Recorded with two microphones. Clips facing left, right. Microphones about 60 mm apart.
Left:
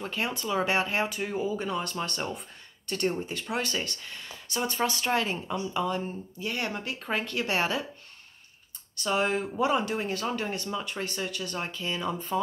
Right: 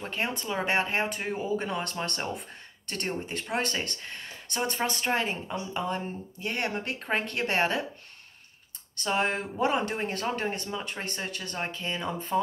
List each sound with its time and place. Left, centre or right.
0.0 s speech: right
5.0 s speech: right
8.9 s speech: right